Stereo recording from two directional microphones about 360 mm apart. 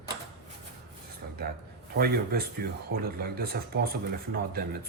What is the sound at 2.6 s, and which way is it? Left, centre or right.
Speech, right.